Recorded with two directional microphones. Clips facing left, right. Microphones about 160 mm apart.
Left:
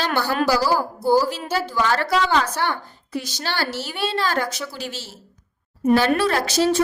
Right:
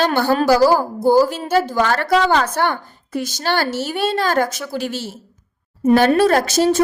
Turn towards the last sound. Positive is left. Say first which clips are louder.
# right 4 dB
turn(degrees=-45)  # may be behind; listen again after turning